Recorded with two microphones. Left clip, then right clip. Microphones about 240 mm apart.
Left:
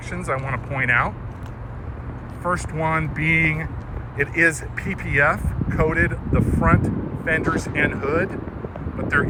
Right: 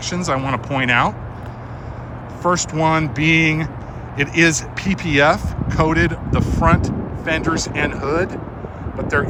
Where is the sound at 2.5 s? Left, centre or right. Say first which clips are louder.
Right 5 dB; centre.